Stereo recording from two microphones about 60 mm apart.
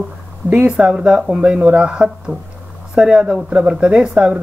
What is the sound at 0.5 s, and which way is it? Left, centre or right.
Speech, centre.